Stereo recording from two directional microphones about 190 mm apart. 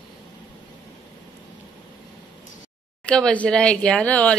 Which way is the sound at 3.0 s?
5° left (ahead or behind).